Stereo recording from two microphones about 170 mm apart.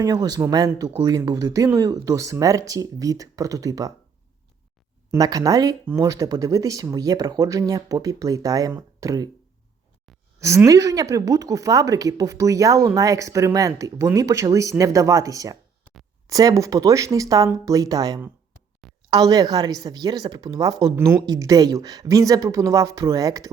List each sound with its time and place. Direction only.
0.0 s a woman's voice: 25° right (ahead or behind)
5.1 s a woman's voice: 20° right (ahead or behind)
10.4 s a woman's voice: 20° right (ahead or behind)